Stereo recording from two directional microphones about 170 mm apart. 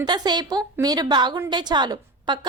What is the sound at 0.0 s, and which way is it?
A woman's voice, 25° right (ahead or behind).